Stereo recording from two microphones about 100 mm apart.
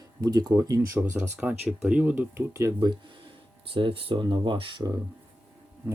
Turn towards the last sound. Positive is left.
turn(degrees=-20)  # may be behind; listen again after turning